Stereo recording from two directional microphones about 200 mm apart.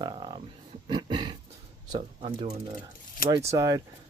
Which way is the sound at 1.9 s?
30° right (ahead or behind).